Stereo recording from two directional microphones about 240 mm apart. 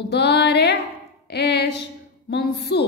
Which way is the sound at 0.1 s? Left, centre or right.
Left.